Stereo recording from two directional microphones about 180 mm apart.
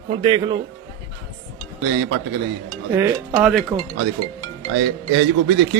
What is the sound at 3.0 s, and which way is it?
Speech, 15° right (ahead or behind).